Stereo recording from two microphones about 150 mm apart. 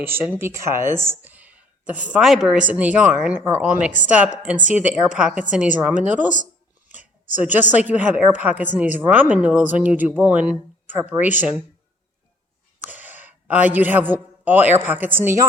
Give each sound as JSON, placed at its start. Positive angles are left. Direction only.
{"t": 0.0, "sound": "speech", "side_deg": -15}
{"t": 6.3, "sound": "a sound", "side_deg": -60}
{"t": 7.3, "sound": "speech", "side_deg": -10}
{"t": 12.9, "sound": "a man's voice", "side_deg": -10}